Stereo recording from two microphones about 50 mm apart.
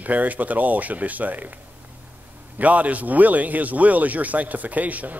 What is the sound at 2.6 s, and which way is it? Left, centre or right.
Speech, right.